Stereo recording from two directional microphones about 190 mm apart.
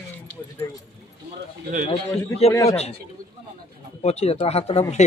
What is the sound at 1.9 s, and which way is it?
Speech, 30° left (ahead or behind).